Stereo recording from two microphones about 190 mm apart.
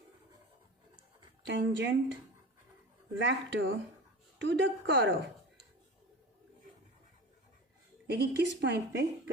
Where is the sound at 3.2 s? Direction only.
65° right (ahead or behind).